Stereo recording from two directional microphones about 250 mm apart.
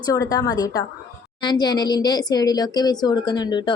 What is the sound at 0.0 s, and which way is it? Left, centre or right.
A woman's voice, centre.